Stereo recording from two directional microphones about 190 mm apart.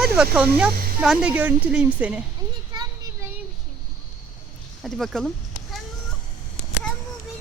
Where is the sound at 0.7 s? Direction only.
50° right (ahead or behind).